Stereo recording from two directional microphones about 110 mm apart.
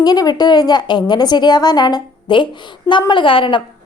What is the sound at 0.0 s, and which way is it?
A woman's voice, 35° left (ahead or behind).